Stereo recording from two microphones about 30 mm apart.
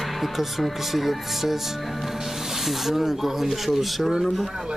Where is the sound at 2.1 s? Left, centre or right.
Centre.